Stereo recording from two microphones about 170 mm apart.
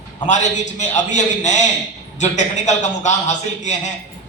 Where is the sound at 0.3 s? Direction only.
45° left (ahead or behind).